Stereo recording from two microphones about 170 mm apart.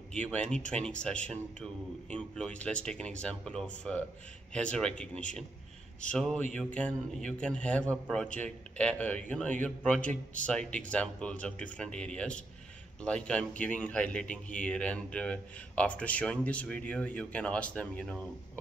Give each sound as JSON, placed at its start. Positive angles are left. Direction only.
{"t": 0.1, "sound": "a man's voice", "side_deg": 5}